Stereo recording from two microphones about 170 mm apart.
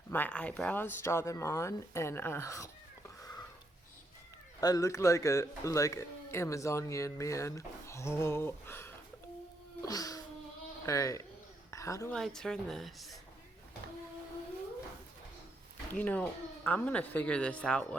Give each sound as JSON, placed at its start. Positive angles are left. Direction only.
{"t": 0.1, "sound": "speech", "side_deg": 10}
{"t": 3.2, "sound": "a sound", "side_deg": 20}
{"t": 4.6, "sound": "speech", "side_deg": 20}
{"t": 9.8, "sound": "cat", "side_deg": 20}
{"t": 10.8, "sound": "speech", "side_deg": 20}
{"t": 11.7, "sound": "a sound", "side_deg": 20}
{"t": 12.1, "sound": "speech", "side_deg": 0}
{"t": 16.0, "sound": "speech", "side_deg": 10}